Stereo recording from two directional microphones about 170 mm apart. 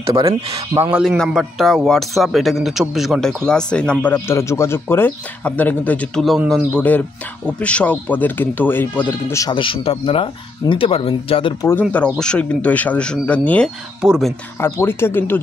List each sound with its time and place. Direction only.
0.0 s speech: 20° right (ahead or behind)
0.9 s speech: centre (ahead or behind); by 11.5 s 30° left (ahead or behind)
12.2 s speech: 5° left (ahead or behind)
14.0 s speech: 5° right (ahead or behind)
14.6 s speech: 15° left (ahead or behind)